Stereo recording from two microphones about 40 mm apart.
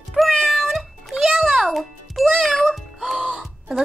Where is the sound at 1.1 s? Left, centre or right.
Centre.